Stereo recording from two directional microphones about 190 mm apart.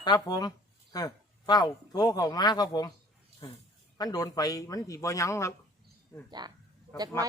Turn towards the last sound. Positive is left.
turn(degrees=15)  # may be behind; listen again after turning